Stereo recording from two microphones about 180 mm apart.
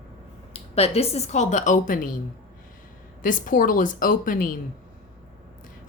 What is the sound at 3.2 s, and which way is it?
A woman's voice, 45° left (ahead or behind).